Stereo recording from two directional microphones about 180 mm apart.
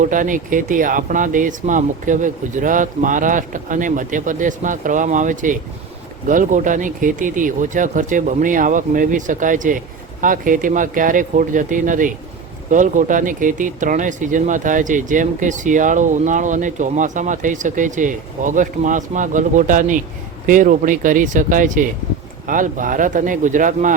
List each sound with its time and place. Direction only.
0.0 s speech: 45° right (ahead or behind)